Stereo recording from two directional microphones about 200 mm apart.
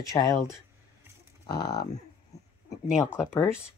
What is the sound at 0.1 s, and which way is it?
Speech, 15° left (ahead or behind).